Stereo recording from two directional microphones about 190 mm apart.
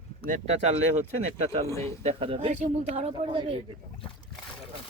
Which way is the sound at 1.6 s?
15° left (ahead or behind).